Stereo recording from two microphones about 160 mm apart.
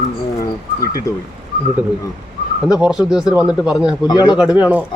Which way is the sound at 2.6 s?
5° right (ahead or behind).